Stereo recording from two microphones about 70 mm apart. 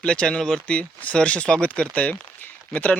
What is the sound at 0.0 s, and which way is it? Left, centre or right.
Speech, centre.